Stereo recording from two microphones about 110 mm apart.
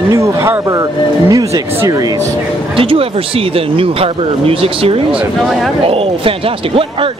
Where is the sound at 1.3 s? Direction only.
30° right (ahead or behind).